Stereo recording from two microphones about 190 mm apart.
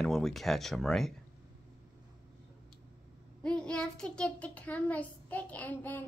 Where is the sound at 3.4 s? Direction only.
5° left (ahead or behind).